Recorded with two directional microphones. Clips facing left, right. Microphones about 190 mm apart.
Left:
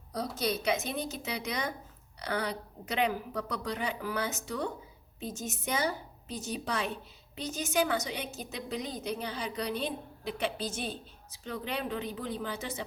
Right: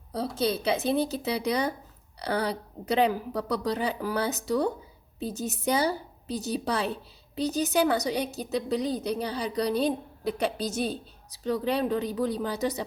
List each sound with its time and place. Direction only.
0.1 s a woman's voice: 30° right (ahead or behind)